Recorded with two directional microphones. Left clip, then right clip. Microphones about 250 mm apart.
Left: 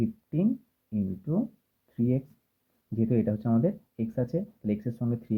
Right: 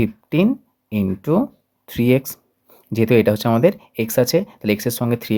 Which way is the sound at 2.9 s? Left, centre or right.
Right.